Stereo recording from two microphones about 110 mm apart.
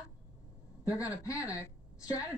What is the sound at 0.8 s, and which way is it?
Speech, 30° left (ahead or behind).